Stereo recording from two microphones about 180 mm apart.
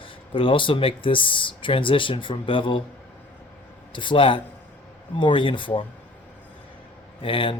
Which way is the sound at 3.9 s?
25° left (ahead or behind).